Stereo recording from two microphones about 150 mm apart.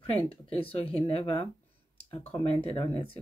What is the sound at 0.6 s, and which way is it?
Speech, 40° left (ahead or behind).